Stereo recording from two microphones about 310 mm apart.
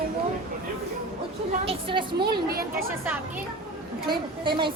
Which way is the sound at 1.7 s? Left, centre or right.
Centre.